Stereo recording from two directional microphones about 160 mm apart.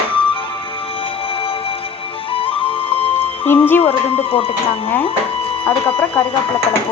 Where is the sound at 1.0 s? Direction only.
35° left (ahead or behind).